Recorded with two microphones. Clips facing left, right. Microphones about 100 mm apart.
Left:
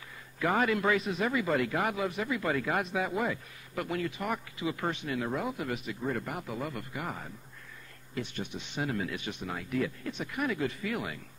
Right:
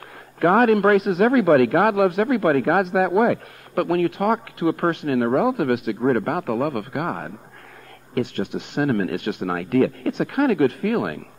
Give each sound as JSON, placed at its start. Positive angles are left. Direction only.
{"t": 0.4, "sound": "a man's voice", "side_deg": -55}